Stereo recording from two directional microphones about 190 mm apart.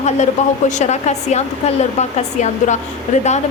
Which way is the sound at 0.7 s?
40° left (ahead or behind).